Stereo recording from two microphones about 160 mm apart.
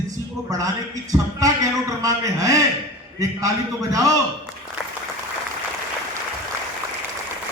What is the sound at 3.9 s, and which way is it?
Speech, 20° right (ahead or behind).